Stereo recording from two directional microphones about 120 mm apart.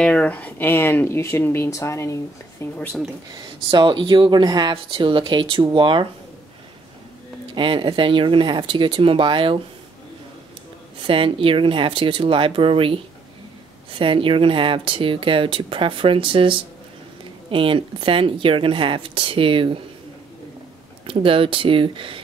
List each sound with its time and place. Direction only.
0.0 s speech: 10° left (ahead or behind)
3.7 s speech: 40° right (ahead or behind)
7.5 s speech: 45° right (ahead or behind)
11.0 s speech: 45° right (ahead or behind)
21.1 s speech: 50° right (ahead or behind)